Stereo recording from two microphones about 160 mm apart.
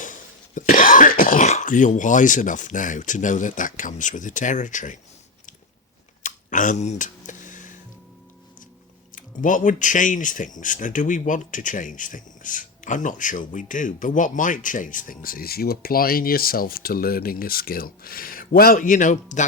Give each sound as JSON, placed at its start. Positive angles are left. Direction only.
{"t": 0.0, "sound": "speech", "side_deg": 55}
{"t": 6.2, "sound": "a sound", "side_deg": 55}
{"t": 9.1, "sound": "speech", "side_deg": 55}